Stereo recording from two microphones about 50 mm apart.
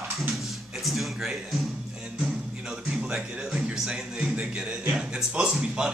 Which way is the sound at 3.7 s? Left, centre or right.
Centre.